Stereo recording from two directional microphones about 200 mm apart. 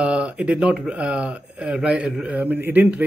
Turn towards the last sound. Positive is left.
turn(degrees=-10)  # may be behind; listen again after turning